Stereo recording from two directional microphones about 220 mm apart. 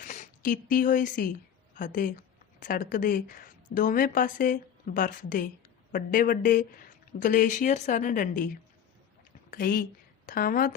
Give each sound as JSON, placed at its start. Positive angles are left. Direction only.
{"t": 0.0, "sound": "a woman's voice", "side_deg": 35}
{"t": 9.5, "sound": "a woman's voice", "side_deg": 40}